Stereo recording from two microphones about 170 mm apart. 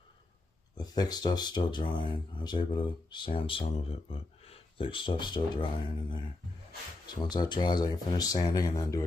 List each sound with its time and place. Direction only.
0.7 s speech: 25° left (ahead or behind)